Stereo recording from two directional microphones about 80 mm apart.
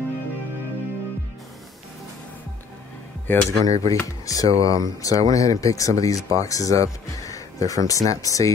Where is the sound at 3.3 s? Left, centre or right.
Left.